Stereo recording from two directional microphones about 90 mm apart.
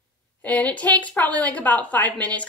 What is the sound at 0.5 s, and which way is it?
A woman's voice, 15° left (ahead or behind).